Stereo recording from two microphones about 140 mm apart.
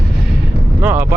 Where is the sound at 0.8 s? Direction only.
15° right (ahead or behind).